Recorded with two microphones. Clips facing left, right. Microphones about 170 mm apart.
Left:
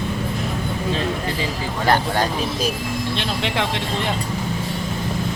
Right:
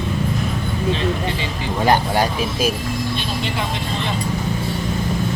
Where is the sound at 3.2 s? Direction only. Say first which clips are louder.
Left 1 dB; 80° left.